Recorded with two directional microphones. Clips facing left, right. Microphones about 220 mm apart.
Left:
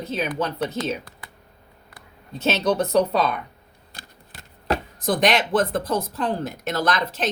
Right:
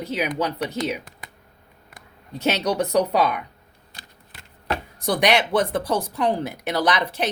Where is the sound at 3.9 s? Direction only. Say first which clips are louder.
Left 3 dB; 40° left (ahead or behind).